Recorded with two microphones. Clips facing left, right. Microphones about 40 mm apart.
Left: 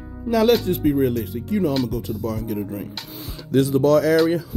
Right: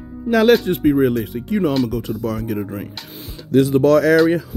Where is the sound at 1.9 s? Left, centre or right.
Right.